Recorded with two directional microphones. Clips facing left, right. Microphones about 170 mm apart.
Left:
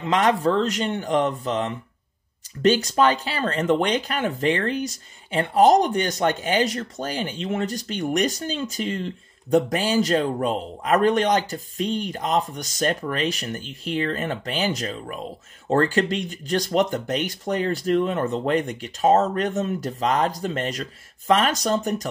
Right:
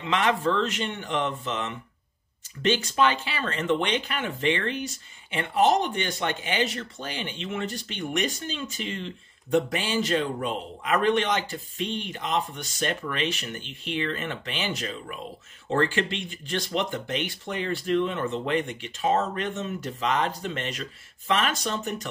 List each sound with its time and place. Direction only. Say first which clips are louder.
0.0 s speech: left 4 dB; 40° left (ahead or behind)